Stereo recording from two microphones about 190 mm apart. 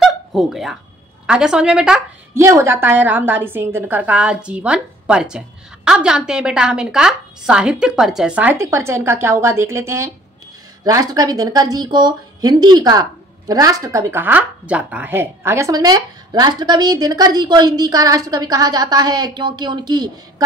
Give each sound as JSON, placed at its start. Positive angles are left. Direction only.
{"t": 0.0, "sound": "a sound", "side_deg": 0}
{"t": 1.2, "sound": "a woman's voice", "side_deg": -5}
{"t": 2.3, "sound": "a woman's voice", "side_deg": -15}